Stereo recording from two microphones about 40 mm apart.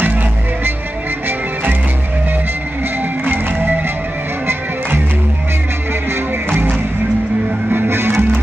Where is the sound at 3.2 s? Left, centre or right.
Right.